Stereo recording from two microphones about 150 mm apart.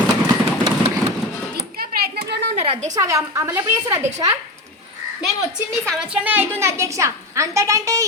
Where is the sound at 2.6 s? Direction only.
50° right (ahead or behind).